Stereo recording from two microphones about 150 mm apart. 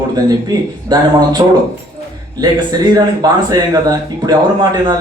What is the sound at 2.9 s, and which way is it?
Speech, 25° right (ahead or behind).